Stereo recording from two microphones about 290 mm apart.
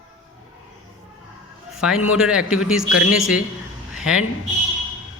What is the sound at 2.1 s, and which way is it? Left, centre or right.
Speech, centre.